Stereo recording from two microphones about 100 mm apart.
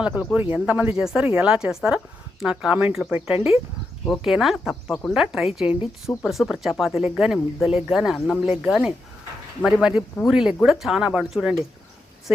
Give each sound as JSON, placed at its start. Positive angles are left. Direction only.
{"t": 0.0, "sound": "speech", "side_deg": -10}
{"t": 10.2, "sound": "speech", "side_deg": -5}